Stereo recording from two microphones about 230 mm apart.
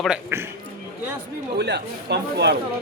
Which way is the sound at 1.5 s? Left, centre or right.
Right.